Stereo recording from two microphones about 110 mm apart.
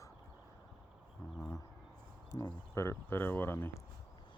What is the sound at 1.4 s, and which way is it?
Speech, 30° left (ahead or behind).